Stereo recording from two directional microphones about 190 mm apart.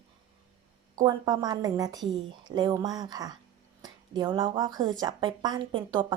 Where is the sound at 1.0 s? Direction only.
20° right (ahead or behind).